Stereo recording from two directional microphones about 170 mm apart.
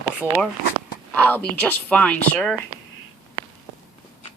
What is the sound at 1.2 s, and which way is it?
A woman's voice, 10° left (ahead or behind).